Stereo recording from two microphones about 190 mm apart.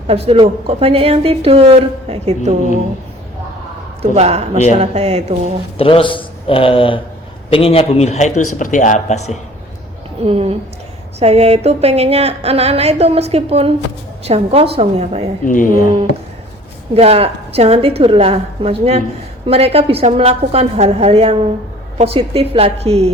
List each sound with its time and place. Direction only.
0.1 s speech: 30° right (ahead or behind)
4.0 s speech: 35° right (ahead or behind)
5.7 s a man's voice: 30° left (ahead or behind)
10.2 s speech: 30° right (ahead or behind)
15.4 s speech: 45° left (ahead or behind)
16.9 s speech: 30° right (ahead or behind)